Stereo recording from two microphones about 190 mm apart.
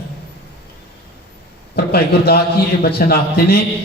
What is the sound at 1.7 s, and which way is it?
A man's voice, 55° left (ahead or behind).